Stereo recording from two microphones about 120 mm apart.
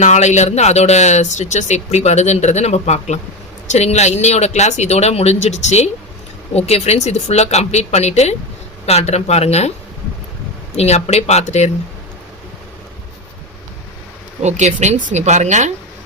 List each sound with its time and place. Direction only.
0.0 s speech: 75° left (ahead or behind)
10.8 s speech: 60° left (ahead or behind)
14.4 s speech: 75° right (ahead or behind)